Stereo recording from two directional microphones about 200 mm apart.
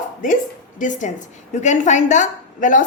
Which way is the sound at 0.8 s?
40° left (ahead or behind).